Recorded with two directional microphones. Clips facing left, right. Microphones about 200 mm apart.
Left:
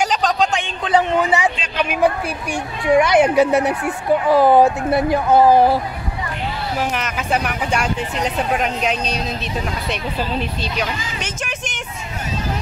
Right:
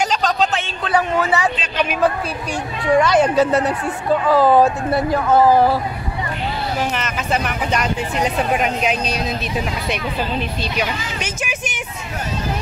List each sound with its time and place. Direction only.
0.3 s speech: 15° left (ahead or behind)
6.8 s speech: 10° left (ahead or behind)
8.2 s speech: 5° right (ahead or behind)
10.8 s vehicle: 5° right (ahead or behind)